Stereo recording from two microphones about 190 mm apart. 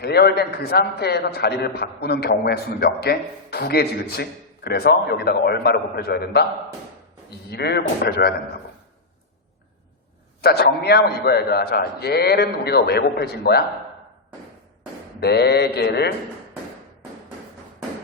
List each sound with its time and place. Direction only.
0.0 s a man's voice: 55° left (ahead or behind)
10.4 s a man's voice: 55° left (ahead or behind)
15.2 s a man's voice: 60° left (ahead or behind)